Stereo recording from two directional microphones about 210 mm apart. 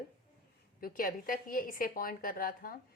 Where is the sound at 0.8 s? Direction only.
45° left (ahead or behind).